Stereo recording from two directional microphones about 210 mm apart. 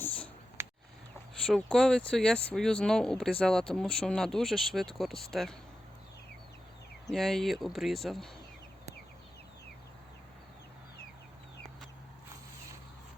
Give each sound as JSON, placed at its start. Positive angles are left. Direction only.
{"t": 0.6, "sound": "a sound", "side_deg": -10}
{"t": 1.5, "sound": "speech", "side_deg": 0}
{"t": 7.1, "sound": "speech", "side_deg": 0}